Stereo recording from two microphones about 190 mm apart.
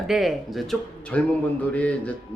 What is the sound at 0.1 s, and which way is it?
Speech, centre (ahead or behind).